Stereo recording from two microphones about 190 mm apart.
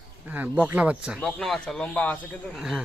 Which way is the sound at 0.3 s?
10° right (ahead or behind).